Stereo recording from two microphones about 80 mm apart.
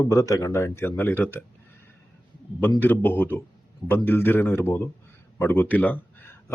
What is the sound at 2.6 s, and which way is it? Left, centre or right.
Speech, left.